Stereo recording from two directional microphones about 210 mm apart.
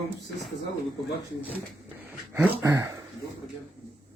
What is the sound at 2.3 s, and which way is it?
Speech, 10° right (ahead or behind).